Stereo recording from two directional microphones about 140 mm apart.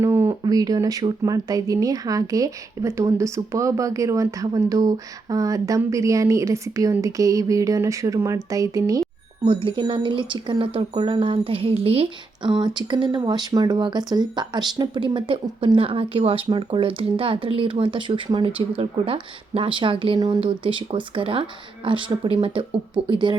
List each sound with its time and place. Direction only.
0.0 s a sound: 15° right (ahead or behind)
0.4 s speech: 25° right (ahead or behind)
9.5 s speech: 40° right (ahead or behind)